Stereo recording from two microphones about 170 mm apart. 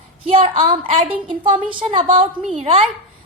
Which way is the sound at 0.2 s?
35° right (ahead or behind).